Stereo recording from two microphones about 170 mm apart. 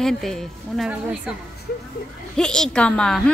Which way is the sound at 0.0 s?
5° left (ahead or behind).